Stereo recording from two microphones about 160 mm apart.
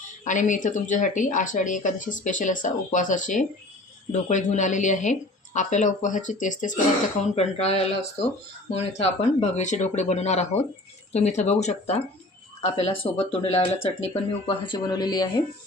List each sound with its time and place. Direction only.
0.3 s speech: 50° left (ahead or behind)
7.3 s speech: 40° left (ahead or behind); by 15.4 s 25° left (ahead or behind)